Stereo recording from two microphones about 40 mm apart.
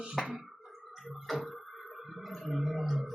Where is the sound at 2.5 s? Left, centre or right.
Centre.